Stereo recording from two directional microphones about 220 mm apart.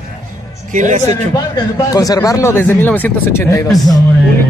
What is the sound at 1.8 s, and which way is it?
Speech, 15° left (ahead or behind).